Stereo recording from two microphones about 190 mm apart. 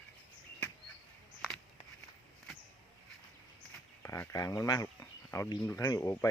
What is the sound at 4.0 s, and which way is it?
Speech, 15° left (ahead or behind).